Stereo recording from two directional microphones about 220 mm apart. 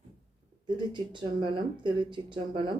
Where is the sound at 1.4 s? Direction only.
20° right (ahead or behind).